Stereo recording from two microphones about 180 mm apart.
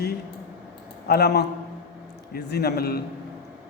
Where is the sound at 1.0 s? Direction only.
65° left (ahead or behind).